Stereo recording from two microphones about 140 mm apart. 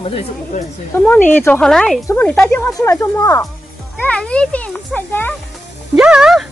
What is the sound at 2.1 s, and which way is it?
A child's voice, 15° left (ahead or behind).